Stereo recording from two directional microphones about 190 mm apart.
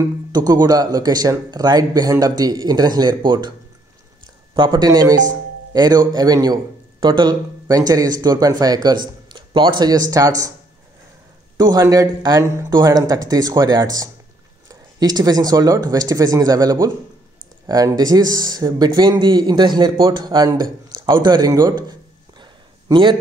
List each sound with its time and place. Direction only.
0.0 s a man's voice: 20° right (ahead or behind)
4.6 s a man's voice: 20° right (ahead or behind)
11.5 s a man's voice: 20° right (ahead or behind)
22.4 s a sound: 25° right (ahead or behind)